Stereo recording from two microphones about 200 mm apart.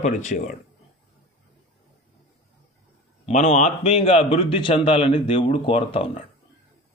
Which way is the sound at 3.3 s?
35° left (ahead or behind).